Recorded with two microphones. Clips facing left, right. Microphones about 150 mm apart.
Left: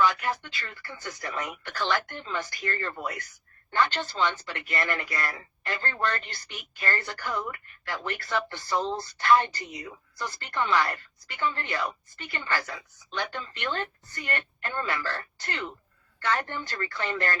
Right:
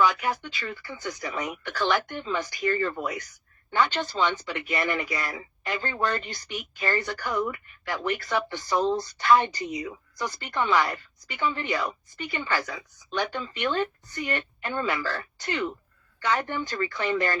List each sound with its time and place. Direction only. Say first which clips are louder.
0.0 s speech: right 1 dB; 20° right (ahead or behind)